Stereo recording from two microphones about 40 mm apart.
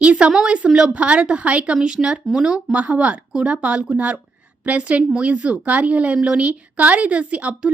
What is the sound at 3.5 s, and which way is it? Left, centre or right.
A woman's voice, right.